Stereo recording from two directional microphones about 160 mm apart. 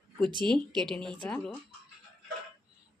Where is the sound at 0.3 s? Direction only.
30° right (ahead or behind).